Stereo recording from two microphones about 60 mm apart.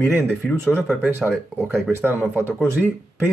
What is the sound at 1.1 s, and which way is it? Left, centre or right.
Speech, right.